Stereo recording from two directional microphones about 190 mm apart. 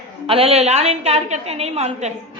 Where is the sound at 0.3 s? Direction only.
30° right (ahead or behind).